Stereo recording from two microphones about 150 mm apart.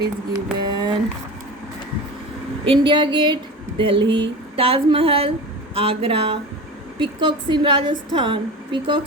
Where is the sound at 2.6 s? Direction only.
35° right (ahead or behind).